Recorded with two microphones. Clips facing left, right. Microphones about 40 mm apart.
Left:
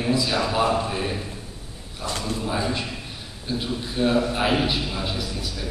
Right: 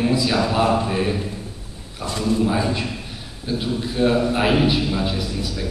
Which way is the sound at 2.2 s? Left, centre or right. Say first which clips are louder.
Right 11 dB; right.